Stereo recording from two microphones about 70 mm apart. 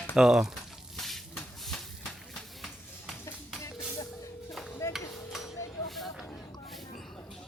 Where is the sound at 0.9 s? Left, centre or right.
Centre.